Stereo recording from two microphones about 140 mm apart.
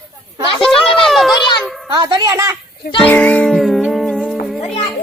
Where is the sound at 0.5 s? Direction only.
Centre (ahead or behind).